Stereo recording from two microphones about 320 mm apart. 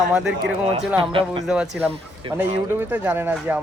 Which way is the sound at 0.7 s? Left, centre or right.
Centre.